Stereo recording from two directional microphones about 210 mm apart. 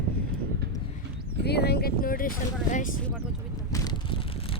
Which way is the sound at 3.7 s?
20° left (ahead or behind).